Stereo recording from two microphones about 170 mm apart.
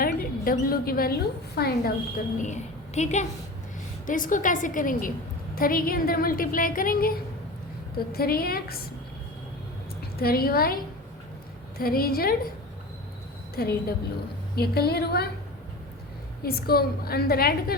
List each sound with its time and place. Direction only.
0.0 s mouse: 60° left (ahead or behind)
1.5 s a woman's voice: 60° left (ahead or behind)
10.2 s a woman's voice: 65° left (ahead or behind)
11.8 s a woman's voice: 60° left (ahead or behind)
13.6 s a woman's voice: 65° left (ahead or behind)
16.4 s a woman's voice: 65° left (ahead or behind)